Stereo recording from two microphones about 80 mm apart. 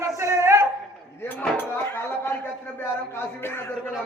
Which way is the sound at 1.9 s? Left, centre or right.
Left.